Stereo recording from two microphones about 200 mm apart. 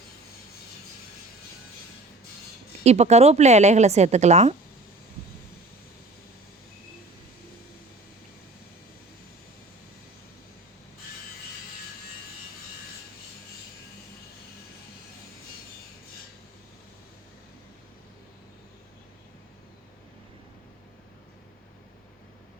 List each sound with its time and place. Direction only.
2.8 s a woman's voice: 35° right (ahead or behind)